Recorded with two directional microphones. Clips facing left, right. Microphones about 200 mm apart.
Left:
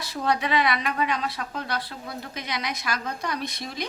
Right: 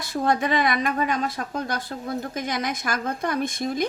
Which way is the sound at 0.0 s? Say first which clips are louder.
Right 3 dB; 50° right (ahead or behind).